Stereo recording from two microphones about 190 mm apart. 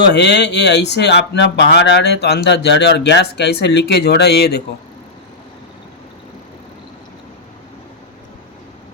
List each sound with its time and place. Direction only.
0.0 s speech: 65° left (ahead or behind)